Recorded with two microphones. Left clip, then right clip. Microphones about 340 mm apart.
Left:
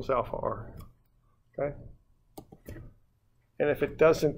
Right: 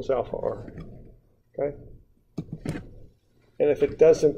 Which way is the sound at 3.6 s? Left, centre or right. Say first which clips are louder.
Right 6 dB; left.